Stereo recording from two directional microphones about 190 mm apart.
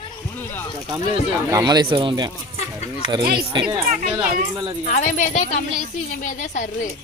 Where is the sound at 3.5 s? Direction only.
25° right (ahead or behind).